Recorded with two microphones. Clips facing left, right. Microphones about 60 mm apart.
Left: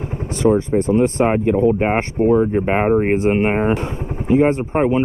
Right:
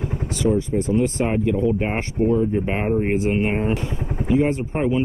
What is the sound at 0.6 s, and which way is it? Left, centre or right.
Speech, left.